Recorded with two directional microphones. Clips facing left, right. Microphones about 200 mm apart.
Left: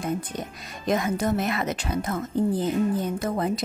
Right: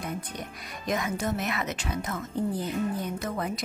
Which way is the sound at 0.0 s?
30° left (ahead or behind).